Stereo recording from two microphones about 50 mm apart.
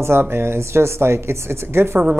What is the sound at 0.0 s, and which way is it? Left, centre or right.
Speech, right.